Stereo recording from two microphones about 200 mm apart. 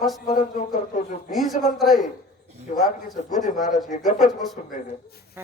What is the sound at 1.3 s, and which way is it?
Speech, centre (ahead or behind).